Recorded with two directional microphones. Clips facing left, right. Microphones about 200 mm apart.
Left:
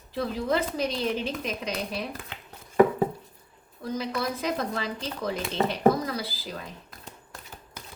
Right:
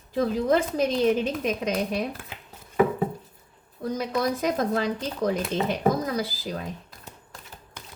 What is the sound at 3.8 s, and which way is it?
A woman's voice, 45° right (ahead or behind).